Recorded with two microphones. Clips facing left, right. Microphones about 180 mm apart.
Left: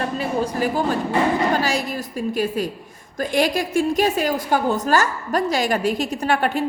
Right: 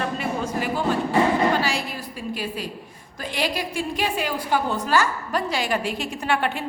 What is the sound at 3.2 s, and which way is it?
A woman's voice, 45° left (ahead or behind).